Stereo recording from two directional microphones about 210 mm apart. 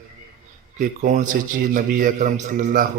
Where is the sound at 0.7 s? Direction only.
40° right (ahead or behind).